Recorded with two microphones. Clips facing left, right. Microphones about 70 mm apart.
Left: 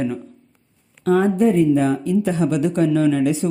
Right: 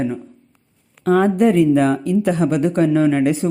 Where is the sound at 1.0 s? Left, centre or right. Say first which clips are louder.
Right 2 dB; right.